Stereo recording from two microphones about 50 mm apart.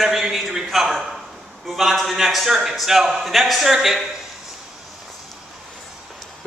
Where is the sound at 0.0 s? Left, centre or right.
Centre.